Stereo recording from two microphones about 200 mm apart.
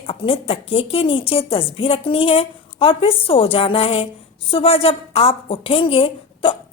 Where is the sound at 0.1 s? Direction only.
25° left (ahead or behind).